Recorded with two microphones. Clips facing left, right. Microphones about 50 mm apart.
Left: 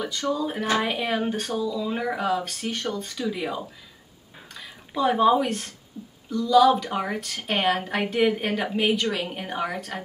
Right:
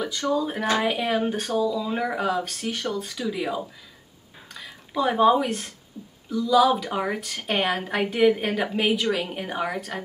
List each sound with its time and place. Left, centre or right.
0.0 s a woman's voice: centre
6.0 s speech: centre
6.3 s a woman's voice: centre